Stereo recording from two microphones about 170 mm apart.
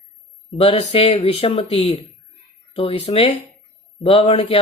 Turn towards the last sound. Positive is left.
turn(degrees=35)  # may be behind; listen again after turning